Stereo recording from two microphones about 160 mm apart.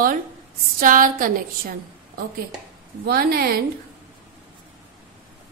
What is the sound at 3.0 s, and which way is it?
Speech, 70° right (ahead or behind).